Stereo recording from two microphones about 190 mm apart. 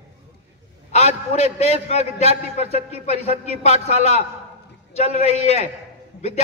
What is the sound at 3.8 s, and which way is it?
A man's voice, 35° left (ahead or behind).